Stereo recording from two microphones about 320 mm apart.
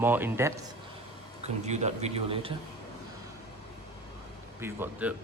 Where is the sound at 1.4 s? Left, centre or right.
Right.